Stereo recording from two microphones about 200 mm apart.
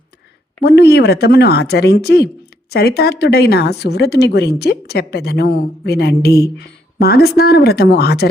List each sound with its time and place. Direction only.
0.6 s speech: 55° left (ahead or behind)